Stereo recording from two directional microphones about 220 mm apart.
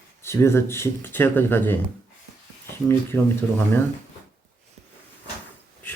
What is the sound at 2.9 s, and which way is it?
Speech, 10° left (ahead or behind).